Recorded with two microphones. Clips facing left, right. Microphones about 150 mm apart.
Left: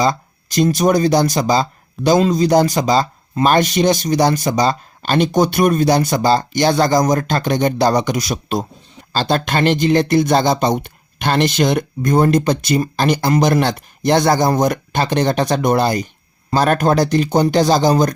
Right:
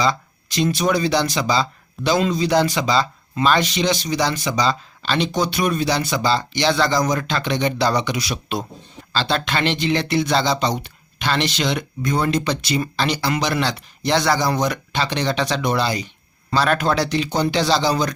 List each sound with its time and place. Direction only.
0.0 s speech: 45° left (ahead or behind)